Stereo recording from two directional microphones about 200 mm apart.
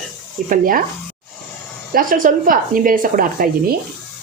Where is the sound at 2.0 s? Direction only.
45° right (ahead or behind).